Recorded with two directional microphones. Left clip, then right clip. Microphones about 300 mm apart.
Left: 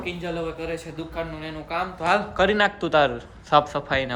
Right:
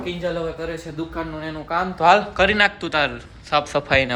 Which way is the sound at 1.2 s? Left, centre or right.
Right.